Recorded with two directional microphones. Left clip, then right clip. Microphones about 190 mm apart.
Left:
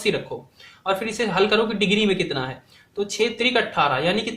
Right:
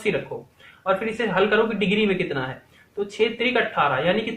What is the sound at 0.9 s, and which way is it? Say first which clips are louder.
Speech: even; 35° left (ahead or behind).